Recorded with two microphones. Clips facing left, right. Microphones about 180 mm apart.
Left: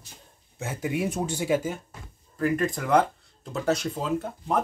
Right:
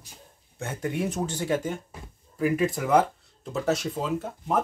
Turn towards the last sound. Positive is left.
turn(degrees=0)  # may be behind; listen again after turning